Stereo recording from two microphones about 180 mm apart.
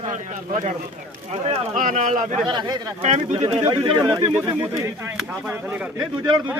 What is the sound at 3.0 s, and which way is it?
A man's voice, 40° right (ahead or behind).